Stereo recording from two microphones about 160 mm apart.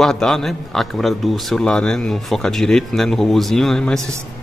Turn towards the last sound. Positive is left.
turn(degrees=5)  # may be behind; listen again after turning